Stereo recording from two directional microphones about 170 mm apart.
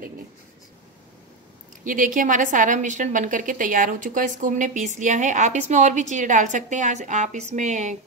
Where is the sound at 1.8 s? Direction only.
50° right (ahead or behind).